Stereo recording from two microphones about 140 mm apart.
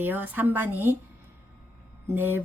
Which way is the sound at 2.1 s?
15° right (ahead or behind).